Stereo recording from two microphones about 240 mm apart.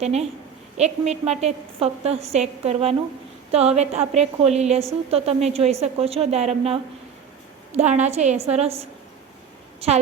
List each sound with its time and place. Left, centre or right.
0.0 s a woman's voice: right